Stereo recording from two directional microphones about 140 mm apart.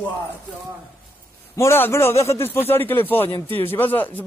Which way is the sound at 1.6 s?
20° left (ahead or behind).